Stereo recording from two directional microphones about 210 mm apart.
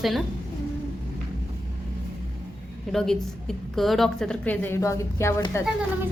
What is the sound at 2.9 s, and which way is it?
A woman's voice, centre (ahead or behind).